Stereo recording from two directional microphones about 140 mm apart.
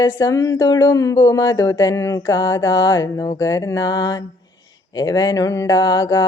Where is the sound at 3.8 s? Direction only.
35° left (ahead or behind).